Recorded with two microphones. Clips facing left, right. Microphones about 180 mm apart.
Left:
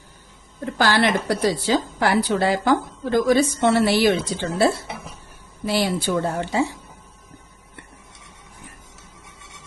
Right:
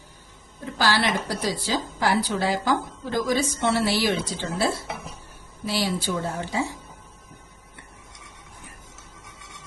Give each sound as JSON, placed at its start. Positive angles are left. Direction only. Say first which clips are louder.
{"t": 0.6, "sound": "a woman's voice", "louder": "left 4 dB", "side_deg": 55}